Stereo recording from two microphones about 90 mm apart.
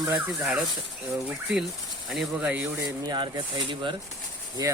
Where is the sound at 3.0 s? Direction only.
55° right (ahead or behind).